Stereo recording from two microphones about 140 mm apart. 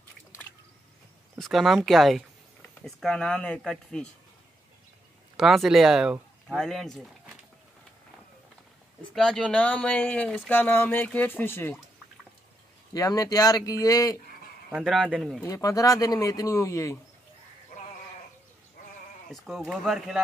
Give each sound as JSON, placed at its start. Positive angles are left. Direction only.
{"t": 1.4, "sound": "speech", "side_deg": 0}
{"t": 5.4, "sound": "speech", "side_deg": 0}
{"t": 9.1, "sound": "speech", "side_deg": 5}
{"t": 12.9, "sound": "speech", "side_deg": 25}
{"t": 14.7, "sound": "speech", "side_deg": 0}
{"t": 15.4, "sound": "speech", "side_deg": 25}
{"t": 19.3, "sound": "speech", "side_deg": 0}